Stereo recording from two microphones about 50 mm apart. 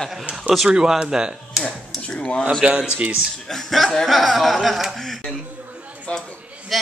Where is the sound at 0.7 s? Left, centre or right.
Centre.